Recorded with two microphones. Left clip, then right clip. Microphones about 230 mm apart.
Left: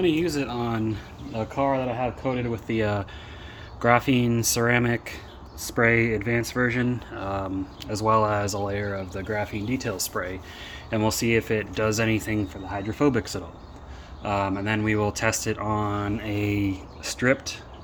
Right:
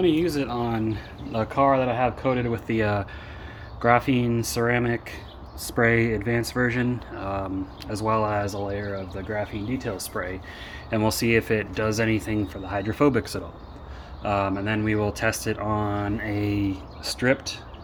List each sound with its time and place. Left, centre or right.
0.0 s speech: centre
1.3 s speech: centre
5.6 s speech: centre
12.6 s speech: centre